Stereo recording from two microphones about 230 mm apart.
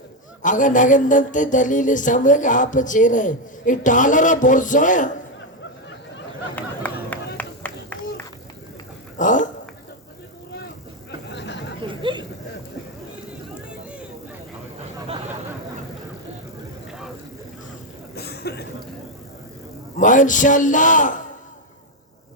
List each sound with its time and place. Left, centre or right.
0.4 s mantra: left
6.6 s run: centre
9.1 s a sound: left
11.3 s chatter: left
11.8 s a sound: right
18.1 s cough: left
20.0 s mantra: left